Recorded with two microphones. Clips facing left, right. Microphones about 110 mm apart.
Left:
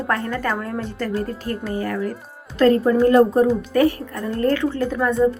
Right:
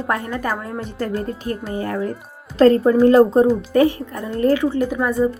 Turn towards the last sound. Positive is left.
turn(degrees=-10)  # may be behind; listen again after turning